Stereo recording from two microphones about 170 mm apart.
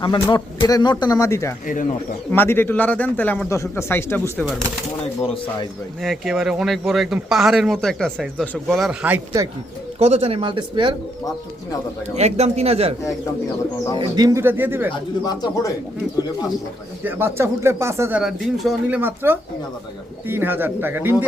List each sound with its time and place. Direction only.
0.0 s a man's voice: 25° left (ahead or behind)
1.6 s speech: 50° left (ahead or behind)
2.3 s speech: 10° left (ahead or behind)
5.2 s speech: 30° left (ahead or behind)
6.0 s speech: centre (ahead or behind)
10.0 s speech: 35° right (ahead or behind)
12.1 s speech: 40° right (ahead or behind)
14.2 s speech: 20° right (ahead or behind)
15.2 s a man's voice: 20° left (ahead or behind)
17.0 s speech: 10° right (ahead or behind)
18.2 s speech: centre (ahead or behind)